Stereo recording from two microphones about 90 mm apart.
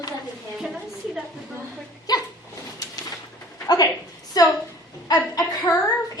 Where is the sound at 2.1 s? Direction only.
45° left (ahead or behind).